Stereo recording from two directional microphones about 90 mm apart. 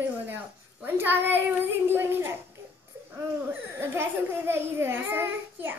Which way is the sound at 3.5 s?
25° right (ahead or behind).